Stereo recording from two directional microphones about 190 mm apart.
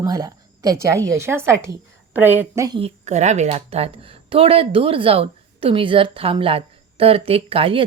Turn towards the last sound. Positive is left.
turn(degrees=-30)  # may be behind; listen again after turning